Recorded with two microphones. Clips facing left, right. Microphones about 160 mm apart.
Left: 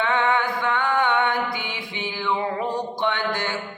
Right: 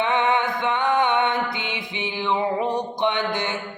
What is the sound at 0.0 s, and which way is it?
Music, 20° right (ahead or behind).